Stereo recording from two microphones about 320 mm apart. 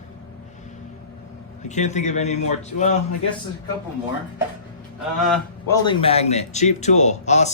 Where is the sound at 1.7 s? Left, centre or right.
Left.